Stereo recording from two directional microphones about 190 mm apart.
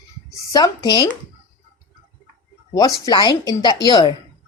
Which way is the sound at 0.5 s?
20° left (ahead or behind).